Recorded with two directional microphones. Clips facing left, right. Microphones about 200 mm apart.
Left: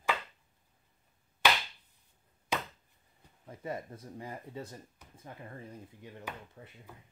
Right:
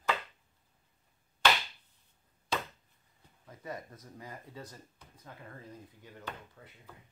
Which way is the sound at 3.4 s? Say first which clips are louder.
Left 4 dB; 30° left (ahead or behind).